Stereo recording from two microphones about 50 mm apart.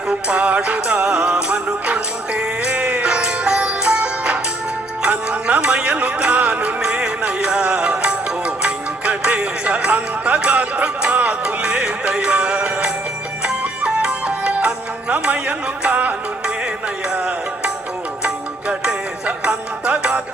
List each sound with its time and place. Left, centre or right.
0.1 s music: right
19.5 s music: right